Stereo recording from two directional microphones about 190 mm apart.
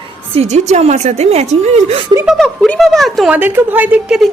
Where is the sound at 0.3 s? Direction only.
35° right (ahead or behind).